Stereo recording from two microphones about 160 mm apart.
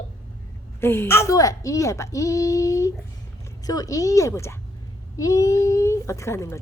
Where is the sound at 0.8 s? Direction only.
15° left (ahead or behind).